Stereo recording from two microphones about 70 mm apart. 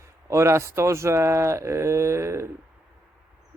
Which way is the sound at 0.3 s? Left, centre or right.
Right.